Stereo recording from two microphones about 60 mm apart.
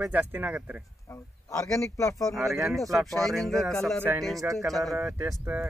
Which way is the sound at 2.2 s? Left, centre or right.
Centre.